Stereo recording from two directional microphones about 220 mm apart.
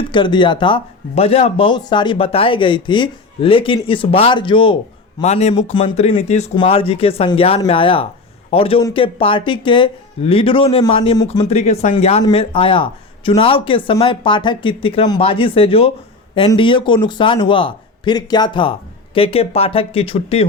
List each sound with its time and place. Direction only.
0.0 s speech: 20° left (ahead or behind)